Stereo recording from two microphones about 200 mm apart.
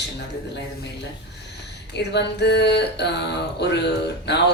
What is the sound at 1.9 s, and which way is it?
Speech, 55° left (ahead or behind).